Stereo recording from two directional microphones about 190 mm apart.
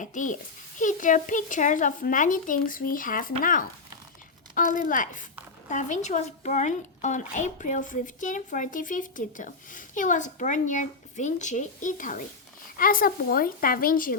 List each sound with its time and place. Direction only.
0.0 s a woman's voice: 40° left (ahead or behind)
4.8 s a woman's voice: 45° left (ahead or behind)